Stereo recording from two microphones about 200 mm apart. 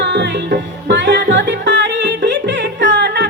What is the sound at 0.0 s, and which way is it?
Music, 60° right (ahead or behind).